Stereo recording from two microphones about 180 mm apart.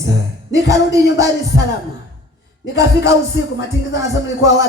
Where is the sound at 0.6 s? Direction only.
15° right (ahead or behind).